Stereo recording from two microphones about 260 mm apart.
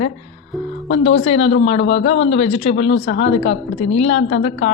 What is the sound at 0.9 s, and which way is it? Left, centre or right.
Speech, left.